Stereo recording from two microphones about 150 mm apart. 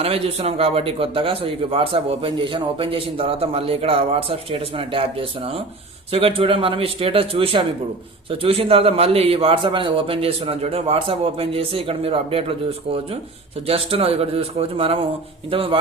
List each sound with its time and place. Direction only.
0.0 s a man's voice: 45° right (ahead or behind)